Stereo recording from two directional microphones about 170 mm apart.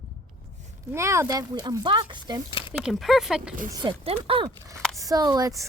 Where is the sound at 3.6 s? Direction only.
20° right (ahead or behind).